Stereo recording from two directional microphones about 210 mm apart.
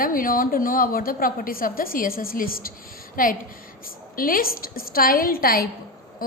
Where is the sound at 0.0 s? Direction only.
40° left (ahead or behind).